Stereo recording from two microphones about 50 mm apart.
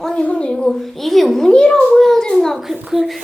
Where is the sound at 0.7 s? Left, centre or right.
Centre.